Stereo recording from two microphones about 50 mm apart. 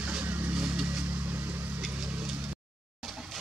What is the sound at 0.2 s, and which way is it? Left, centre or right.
Vehicle, right.